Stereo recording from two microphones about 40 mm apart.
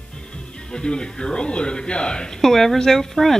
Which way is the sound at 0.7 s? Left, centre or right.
Centre.